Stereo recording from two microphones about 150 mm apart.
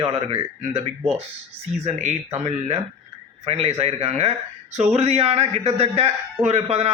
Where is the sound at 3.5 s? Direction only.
45° right (ahead or behind).